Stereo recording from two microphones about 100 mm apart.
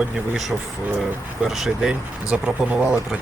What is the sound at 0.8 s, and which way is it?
Speech, 20° right (ahead or behind).